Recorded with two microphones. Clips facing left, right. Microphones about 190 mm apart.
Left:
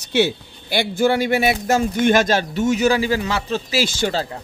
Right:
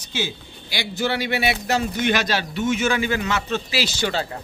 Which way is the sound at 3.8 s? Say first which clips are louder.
Left 5 dB; 50° left (ahead or behind).